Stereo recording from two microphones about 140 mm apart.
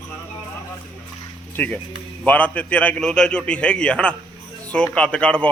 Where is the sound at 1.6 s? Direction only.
10° left (ahead or behind).